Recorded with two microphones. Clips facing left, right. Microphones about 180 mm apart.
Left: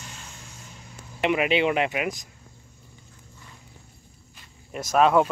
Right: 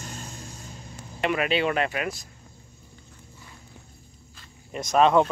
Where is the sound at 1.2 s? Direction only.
15° left (ahead or behind).